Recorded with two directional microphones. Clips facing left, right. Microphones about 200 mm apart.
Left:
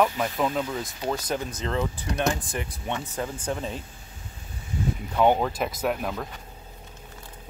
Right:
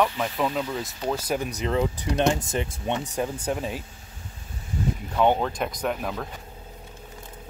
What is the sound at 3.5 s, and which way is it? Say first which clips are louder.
Speech: right 2 dB; 10° right (ahead or behind).